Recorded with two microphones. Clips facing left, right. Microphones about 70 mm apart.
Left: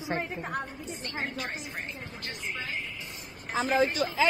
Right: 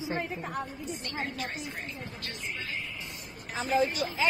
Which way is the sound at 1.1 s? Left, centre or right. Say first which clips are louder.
Left 2 dB; left.